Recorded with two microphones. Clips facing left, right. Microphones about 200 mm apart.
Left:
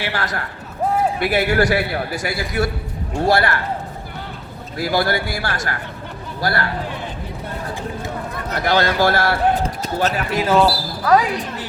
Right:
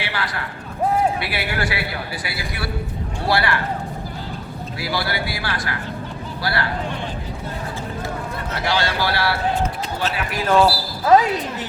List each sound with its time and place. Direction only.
0.0 s a man's voice: 45° left (ahead or behind)
4.8 s a man's voice: 45° left (ahead or behind)
8.6 s a man's voice: 50° left (ahead or behind)
10.4 s speech: 5° left (ahead or behind)
11.1 s speech: 25° right (ahead or behind)